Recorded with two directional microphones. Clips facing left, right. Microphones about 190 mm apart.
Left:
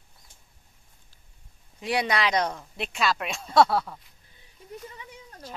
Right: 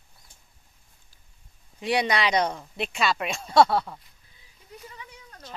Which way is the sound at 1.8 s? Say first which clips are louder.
Right 1 dB; centre (ahead or behind).